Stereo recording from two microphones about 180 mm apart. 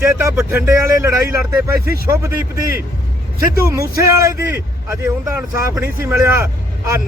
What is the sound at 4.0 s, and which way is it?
Speech, 15° right (ahead or behind).